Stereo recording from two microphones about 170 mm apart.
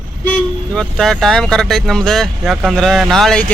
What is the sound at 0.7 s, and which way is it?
Speech, 5° left (ahead or behind).